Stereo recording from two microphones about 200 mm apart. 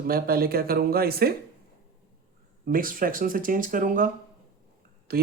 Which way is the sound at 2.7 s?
45° right (ahead or behind).